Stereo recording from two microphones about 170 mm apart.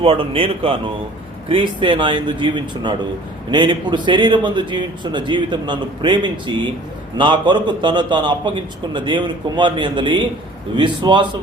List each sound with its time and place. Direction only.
0.0 s a man's voice: 35° right (ahead or behind)